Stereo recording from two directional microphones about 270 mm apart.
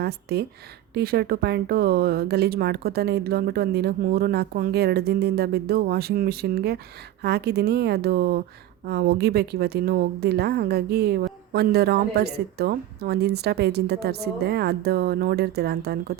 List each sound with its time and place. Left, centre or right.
0.0 s speech: right